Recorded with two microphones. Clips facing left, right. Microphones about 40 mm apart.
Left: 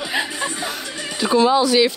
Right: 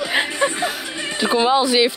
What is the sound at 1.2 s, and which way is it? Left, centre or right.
Speech, right.